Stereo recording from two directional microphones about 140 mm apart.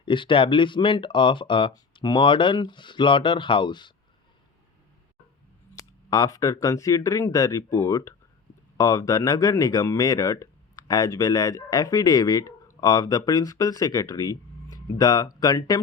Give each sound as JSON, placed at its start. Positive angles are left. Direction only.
{"t": 0.0, "sound": "speech", "side_deg": 35}
{"t": 5.7, "sound": "speech", "side_deg": 25}